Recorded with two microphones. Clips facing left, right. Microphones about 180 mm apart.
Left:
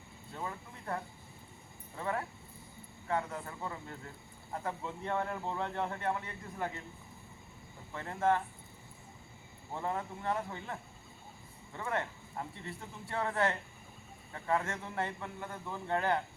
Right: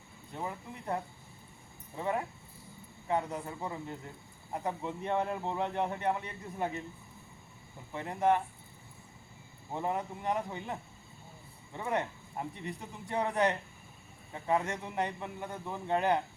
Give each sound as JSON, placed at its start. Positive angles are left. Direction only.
{"t": 0.3, "sound": "a man's voice", "side_deg": -20}
{"t": 7.9, "sound": "a man's voice", "side_deg": -20}
{"t": 9.7, "sound": "a man's voice", "side_deg": -20}